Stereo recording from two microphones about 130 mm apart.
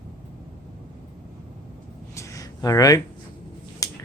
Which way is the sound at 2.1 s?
25° left (ahead or behind).